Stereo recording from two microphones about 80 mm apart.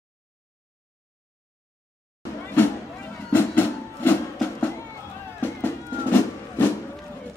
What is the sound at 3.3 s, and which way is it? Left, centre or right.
Music, left.